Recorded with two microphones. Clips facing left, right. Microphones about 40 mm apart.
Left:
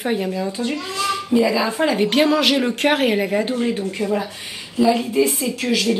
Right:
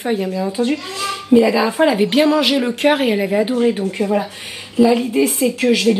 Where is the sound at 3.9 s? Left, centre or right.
Centre.